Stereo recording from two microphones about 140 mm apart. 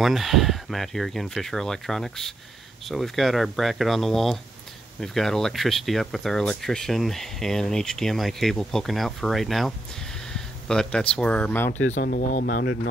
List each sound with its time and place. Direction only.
0.0 s speech: centre (ahead or behind)
11.9 s speech: 70° left (ahead or behind); by 12.7 s 90° left